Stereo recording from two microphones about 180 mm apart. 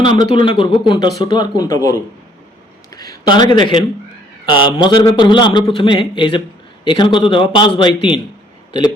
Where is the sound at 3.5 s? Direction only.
25° left (ahead or behind).